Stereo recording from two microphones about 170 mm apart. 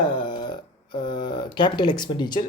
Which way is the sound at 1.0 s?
25° left (ahead or behind).